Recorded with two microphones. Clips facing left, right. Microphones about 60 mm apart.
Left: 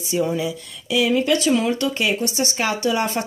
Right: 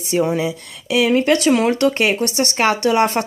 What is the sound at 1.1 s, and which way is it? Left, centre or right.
Speech, right.